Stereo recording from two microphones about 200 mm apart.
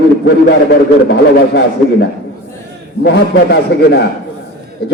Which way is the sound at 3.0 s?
55° left (ahead or behind).